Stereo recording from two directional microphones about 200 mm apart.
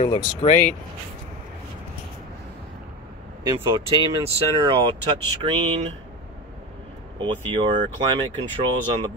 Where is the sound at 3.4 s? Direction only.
20° right (ahead or behind).